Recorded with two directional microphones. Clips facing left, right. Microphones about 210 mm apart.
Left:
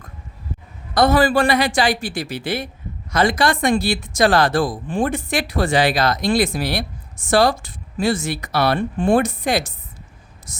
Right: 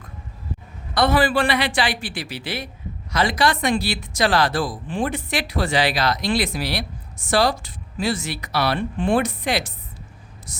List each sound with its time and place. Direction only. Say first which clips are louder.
0.9 s speech: left 3 dB; 40° left (ahead or behind)